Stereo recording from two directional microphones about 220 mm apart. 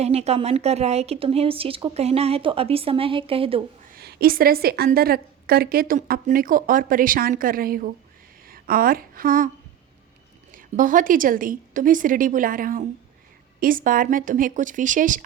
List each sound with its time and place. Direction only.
0.0 s a woman's voice: 30° right (ahead or behind)
3.9 s a woman's voice: 45° right (ahead or behind)
10.5 s a woman's voice: 35° right (ahead or behind)